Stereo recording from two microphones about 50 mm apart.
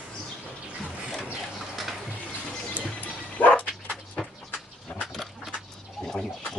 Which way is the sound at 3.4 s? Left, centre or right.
Left.